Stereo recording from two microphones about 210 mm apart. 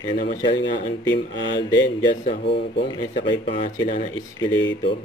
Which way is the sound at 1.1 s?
60° left (ahead or behind).